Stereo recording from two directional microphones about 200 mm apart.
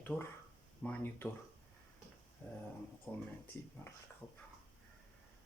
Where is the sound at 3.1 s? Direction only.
5° left (ahead or behind).